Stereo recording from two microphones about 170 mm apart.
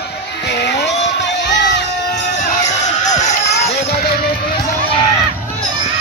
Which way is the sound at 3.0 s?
45° left (ahead or behind).